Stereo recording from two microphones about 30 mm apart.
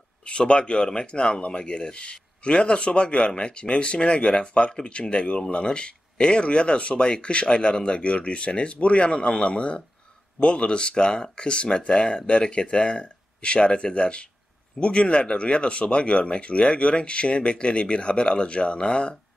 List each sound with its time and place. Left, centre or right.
0.2 s speech: left